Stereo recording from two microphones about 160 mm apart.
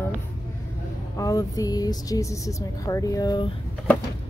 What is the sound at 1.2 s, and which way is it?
Speech, 20° left (ahead or behind).